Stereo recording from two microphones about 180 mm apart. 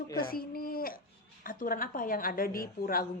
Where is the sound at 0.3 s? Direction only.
55° left (ahead or behind).